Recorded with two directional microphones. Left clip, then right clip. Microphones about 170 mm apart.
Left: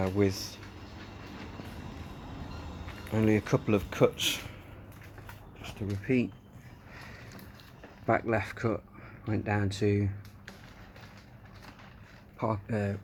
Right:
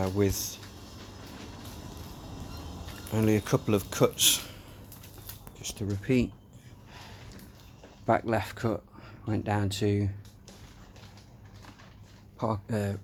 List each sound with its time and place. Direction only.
0.0 s speech: 5° right (ahead or behind)
3.1 s speech: 10° right (ahead or behind)
6.1 s speech: 30° right (ahead or behind)
8.0 s speech: 10° right (ahead or behind)
12.4 s speech: 10° right (ahead or behind)